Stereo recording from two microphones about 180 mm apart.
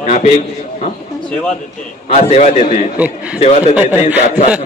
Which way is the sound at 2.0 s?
35° left (ahead or behind).